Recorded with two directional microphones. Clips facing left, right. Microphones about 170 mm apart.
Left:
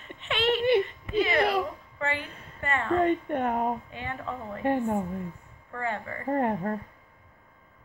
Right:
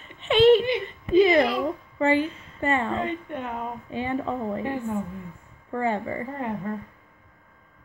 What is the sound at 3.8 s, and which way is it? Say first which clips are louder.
Speech: right 8 dB; 30° right (ahead or behind).